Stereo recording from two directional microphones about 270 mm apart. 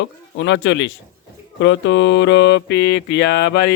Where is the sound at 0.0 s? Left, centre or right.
Left.